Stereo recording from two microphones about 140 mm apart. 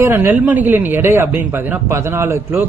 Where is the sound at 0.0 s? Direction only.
15° right (ahead or behind).